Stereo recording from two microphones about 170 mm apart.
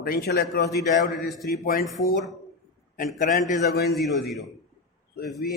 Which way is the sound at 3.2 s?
50° left (ahead or behind).